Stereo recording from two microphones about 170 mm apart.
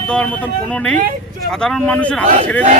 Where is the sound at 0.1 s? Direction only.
5° left (ahead or behind).